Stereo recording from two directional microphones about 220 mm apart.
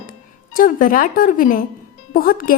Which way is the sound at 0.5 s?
40° left (ahead or behind).